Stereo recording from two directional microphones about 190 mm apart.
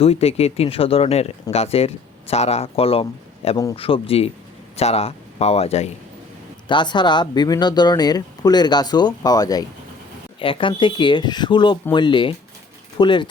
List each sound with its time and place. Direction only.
0.0 s speech: 30° left (ahead or behind)
6.7 s speech: 25° left (ahead or behind)